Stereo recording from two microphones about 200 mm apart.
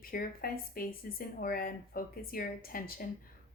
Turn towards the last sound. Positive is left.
turn(degrees=45)  # may be behind; listen again after turning